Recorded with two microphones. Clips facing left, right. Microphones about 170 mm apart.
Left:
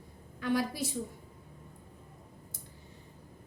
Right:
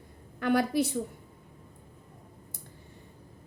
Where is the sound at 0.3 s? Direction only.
65° right (ahead or behind).